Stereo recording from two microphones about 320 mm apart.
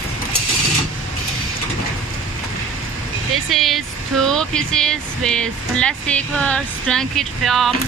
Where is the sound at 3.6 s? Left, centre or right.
Centre.